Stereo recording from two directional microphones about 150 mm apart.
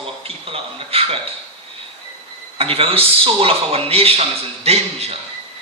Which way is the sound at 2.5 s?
40° right (ahead or behind).